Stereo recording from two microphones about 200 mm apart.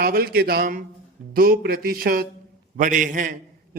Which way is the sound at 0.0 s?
50° right (ahead or behind).